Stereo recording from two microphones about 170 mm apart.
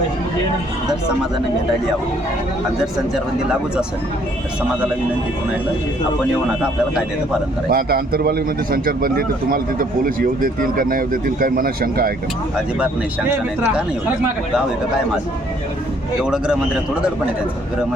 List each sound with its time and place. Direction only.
7.7 s a man's voice: 60° right (ahead or behind)
16.2 s a man's voice: 5° right (ahead or behind)